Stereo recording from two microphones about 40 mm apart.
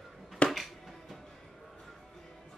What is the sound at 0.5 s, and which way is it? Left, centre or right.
Music, centre.